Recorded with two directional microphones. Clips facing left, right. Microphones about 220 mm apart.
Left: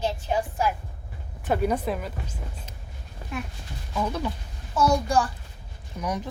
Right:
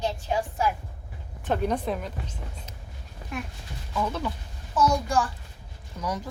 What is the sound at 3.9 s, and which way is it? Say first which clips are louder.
Speech: left 1 dB; 15° left (ahead or behind).